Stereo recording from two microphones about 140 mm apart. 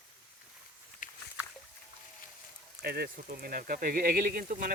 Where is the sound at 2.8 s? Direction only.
90° right.